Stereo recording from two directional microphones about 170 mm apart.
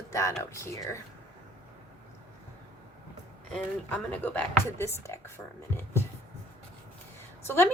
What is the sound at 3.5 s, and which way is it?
Speech, 5° left (ahead or behind).